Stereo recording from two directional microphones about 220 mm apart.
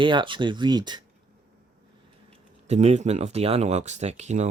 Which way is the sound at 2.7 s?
30° right (ahead or behind).